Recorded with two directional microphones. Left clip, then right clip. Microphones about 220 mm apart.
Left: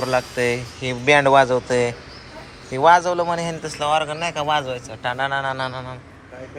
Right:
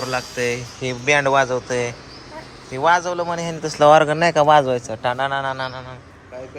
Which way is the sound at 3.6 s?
35° right (ahead or behind).